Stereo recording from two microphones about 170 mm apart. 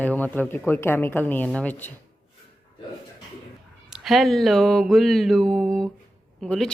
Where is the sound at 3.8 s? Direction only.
Centre (ahead or behind).